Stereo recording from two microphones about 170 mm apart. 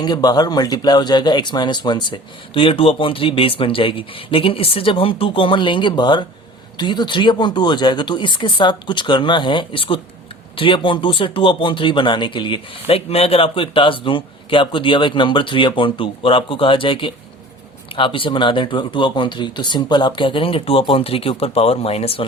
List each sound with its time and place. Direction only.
0.0 s speech: 25° left (ahead or behind)